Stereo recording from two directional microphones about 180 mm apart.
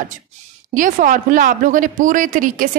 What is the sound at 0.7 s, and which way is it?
Speech, 45° right (ahead or behind).